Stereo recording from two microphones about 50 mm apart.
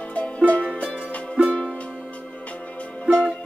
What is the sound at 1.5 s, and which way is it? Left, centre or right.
Music, centre.